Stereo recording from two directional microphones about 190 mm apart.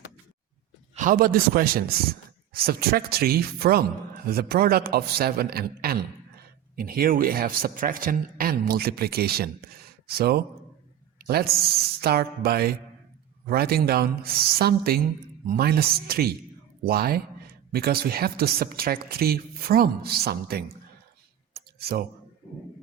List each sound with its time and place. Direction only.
0.9 s speech: 45° right (ahead or behind)
12.0 s speech: 55° right (ahead or behind)
21.5 s a sound: 55° right (ahead or behind)